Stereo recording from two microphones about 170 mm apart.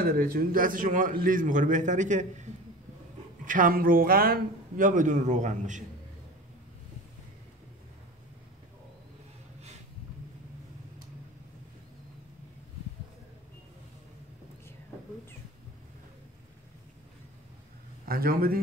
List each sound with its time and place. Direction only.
0.0 s a man's voice: 60° right (ahead or behind)
18.0 s a man's voice: 60° right (ahead or behind)